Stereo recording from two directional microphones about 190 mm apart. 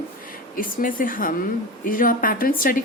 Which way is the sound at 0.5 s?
45° left (ahead or behind).